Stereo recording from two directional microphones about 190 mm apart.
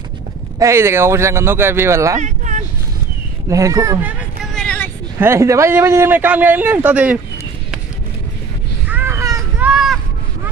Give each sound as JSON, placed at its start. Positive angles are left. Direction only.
{"t": 0.6, "sound": "speech", "side_deg": -15}
{"t": 2.1, "sound": "vehicle", "side_deg": -40}
{"t": 3.4, "sound": "speech", "side_deg": -15}
{"t": 4.6, "sound": "vehicle", "side_deg": 10}
{"t": 5.2, "sound": "speech", "side_deg": -15}
{"t": 8.8, "sound": "a sound", "side_deg": -10}
{"t": 9.7, "sound": "a sound", "side_deg": -5}